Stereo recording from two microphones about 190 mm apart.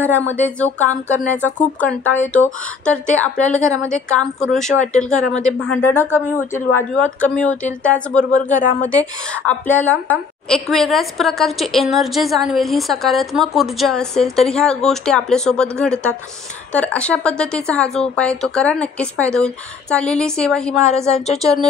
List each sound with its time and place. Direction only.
0.0 s a woman's voice: 10° left (ahead or behind)
8.3 s speech: 40° left (ahead or behind)
9.3 s a woman's voice: 5° left (ahead or behind)